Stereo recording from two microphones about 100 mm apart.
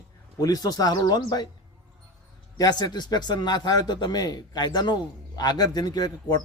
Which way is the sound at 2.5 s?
40° left (ahead or behind).